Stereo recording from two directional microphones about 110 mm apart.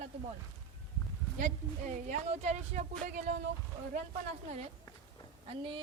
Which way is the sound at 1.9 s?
90° right.